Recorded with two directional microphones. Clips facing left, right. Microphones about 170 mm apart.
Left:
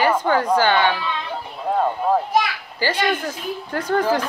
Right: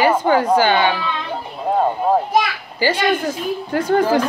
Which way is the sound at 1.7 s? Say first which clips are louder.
Right 3 dB; 30° right (ahead or behind).